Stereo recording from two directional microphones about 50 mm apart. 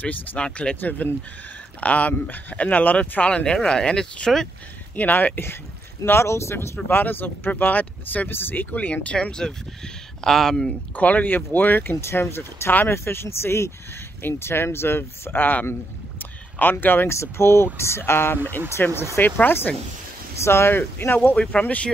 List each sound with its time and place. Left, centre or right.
0.0 s speech: left
0.4 s speech: left
4.9 s speech: left
6.2 s speech: left
6.9 s speech: left
8.3 s speech: left
8.7 s speech: left; by 10.7 s centre
11.0 s speech: left
12.2 s speech: left
16.2 s a sound: left
17.1 s speech: left
18.8 s speech: left
20.4 s speech: left
21.2 s speech: left